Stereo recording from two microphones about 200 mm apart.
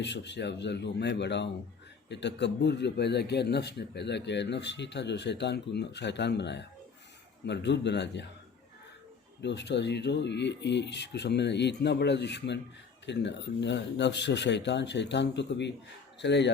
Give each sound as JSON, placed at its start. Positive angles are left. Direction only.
{"t": 0.0, "sound": "a man's voice", "side_deg": 60}
{"t": 9.4, "sound": "a man's voice", "side_deg": 60}